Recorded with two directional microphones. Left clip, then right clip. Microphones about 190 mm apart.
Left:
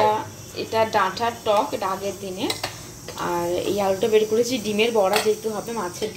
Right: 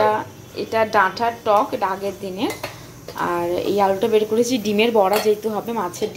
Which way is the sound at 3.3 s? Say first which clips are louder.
Right 2 dB; 10° right (ahead or behind).